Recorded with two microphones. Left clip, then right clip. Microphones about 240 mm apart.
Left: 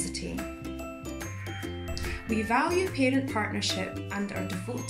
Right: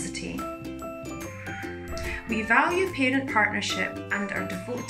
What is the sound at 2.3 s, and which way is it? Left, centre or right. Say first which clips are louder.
A woman's voice: right 4 dB; centre.